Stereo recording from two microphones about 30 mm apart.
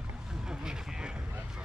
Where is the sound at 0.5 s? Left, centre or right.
Right.